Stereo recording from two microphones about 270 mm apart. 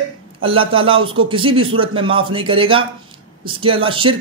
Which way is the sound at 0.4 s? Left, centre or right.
Centre.